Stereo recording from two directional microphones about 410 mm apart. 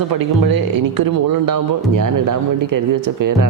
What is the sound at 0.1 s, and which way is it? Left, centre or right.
Speech, right.